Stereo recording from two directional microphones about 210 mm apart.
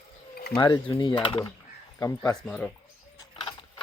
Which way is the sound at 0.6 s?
20° left (ahead or behind).